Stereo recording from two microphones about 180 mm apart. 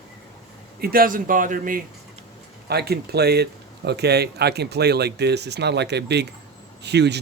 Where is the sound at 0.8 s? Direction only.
55° right (ahead or behind).